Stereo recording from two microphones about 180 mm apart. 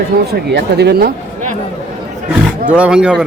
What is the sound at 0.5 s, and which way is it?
Speech, 65° right (ahead or behind).